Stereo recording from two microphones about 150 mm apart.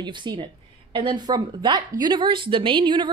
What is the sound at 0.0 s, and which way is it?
Speech, 30° right (ahead or behind).